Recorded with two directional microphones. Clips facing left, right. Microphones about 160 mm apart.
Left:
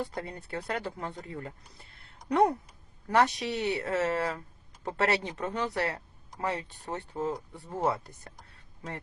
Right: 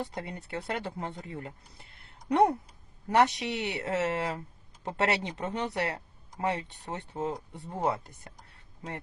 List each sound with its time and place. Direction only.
0.0 s speech: 20° right (ahead or behind)
2.0 s a sound: 25° right (ahead or behind)
3.1 s speech: 20° right (ahead or behind)